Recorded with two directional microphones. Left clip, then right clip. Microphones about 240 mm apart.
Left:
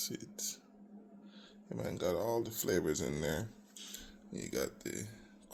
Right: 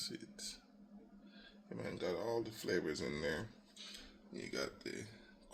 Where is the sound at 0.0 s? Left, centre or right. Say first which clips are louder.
Left 4 dB; left.